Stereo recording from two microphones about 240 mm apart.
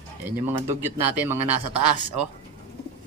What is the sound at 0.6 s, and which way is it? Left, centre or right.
Speech, centre.